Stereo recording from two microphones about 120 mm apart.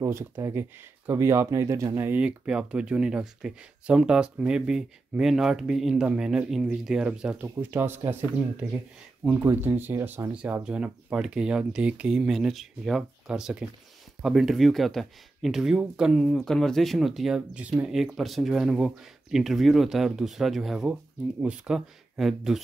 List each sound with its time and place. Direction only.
0.0 s speech: 25° right (ahead or behind); by 7.3 s 5° right (ahead or behind)
7.4 s speech: 20° right (ahead or behind)
9.3 s speech: 15° right (ahead or behind)